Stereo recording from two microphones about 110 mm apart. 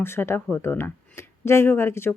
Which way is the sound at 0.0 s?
20° left (ahead or behind).